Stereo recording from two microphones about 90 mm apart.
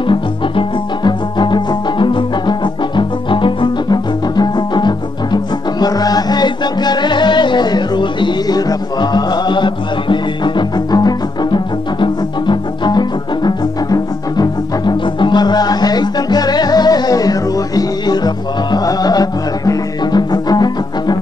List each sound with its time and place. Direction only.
0.0 s music: 65° left (ahead or behind); by 21.2 s 50° left (ahead or behind)